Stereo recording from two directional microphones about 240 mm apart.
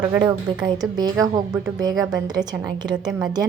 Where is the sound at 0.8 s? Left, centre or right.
Centre.